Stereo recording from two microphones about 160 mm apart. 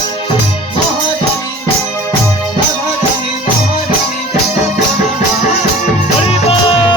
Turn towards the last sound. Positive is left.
turn(degrees=35)  # may be behind; listen again after turning